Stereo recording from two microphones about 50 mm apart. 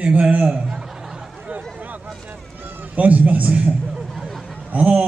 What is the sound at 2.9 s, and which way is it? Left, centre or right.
Speech, right.